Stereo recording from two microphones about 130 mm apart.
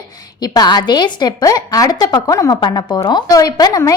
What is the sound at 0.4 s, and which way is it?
A woman's voice, 30° left (ahead or behind).